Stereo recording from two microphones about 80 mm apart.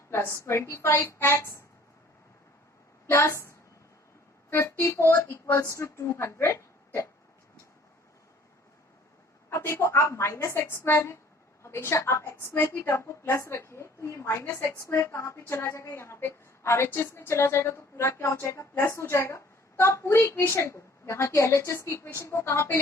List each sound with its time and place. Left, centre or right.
0.1 s a woman's voice: left
3.1 s a woman's voice: left
4.6 s a woman's voice: left
9.5 s a woman's voice: left
20.5 s a woman's voice: left